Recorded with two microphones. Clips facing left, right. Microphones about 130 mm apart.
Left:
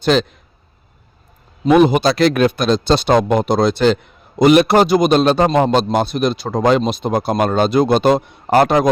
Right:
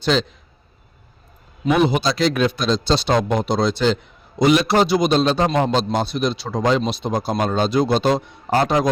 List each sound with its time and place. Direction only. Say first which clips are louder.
0.0 s a man's voice: left 4 dB; 55° left (ahead or behind)
1.8 s a man's voice: left 5 dB; 55° left (ahead or behind)